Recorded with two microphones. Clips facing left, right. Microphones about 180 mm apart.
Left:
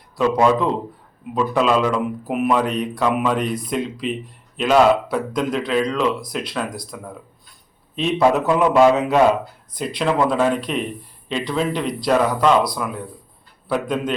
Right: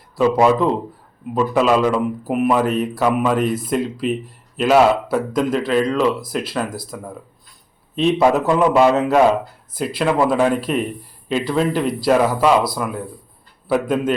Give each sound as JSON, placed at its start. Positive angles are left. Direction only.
{"t": 0.2, "sound": "a man's voice", "side_deg": -5}